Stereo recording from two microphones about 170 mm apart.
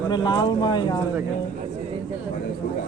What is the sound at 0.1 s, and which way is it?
Speech, 25° left (ahead or behind).